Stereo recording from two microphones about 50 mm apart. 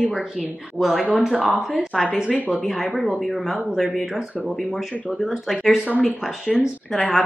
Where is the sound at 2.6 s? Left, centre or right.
Centre.